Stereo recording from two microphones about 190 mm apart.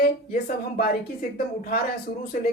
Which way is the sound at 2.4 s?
50° left (ahead or behind).